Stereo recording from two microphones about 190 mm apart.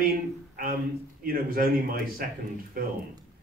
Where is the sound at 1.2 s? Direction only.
50° right (ahead or behind).